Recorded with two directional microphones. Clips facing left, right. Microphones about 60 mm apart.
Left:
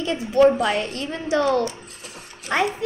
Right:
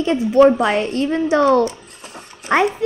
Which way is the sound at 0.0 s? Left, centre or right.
Right.